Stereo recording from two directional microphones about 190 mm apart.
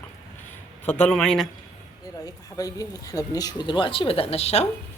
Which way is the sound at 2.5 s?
20° left (ahead or behind).